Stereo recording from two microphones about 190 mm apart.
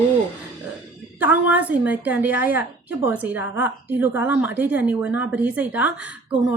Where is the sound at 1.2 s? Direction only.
10° right (ahead or behind).